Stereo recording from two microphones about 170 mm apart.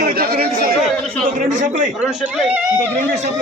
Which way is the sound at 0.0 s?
60° right (ahead or behind).